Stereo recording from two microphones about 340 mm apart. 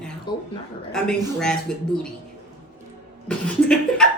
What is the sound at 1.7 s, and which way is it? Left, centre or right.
Speech, centre.